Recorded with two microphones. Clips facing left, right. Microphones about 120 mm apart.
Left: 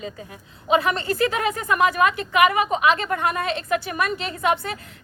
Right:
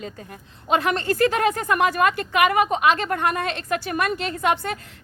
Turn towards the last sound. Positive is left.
turn(degrees=-50)  # may be behind; listen again after turning